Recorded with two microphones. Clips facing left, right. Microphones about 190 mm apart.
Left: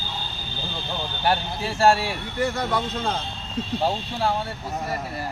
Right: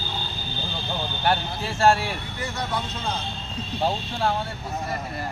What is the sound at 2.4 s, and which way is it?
Speech, 55° left (ahead or behind).